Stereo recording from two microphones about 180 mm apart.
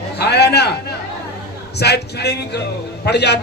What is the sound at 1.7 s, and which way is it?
A man's voice, 65° left (ahead or behind).